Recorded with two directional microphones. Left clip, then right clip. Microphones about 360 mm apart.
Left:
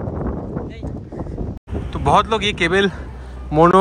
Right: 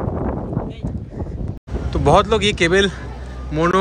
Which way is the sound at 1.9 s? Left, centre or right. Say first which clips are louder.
Right 1 dB; centre.